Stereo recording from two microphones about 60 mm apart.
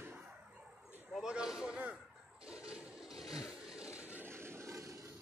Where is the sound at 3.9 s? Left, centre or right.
Right.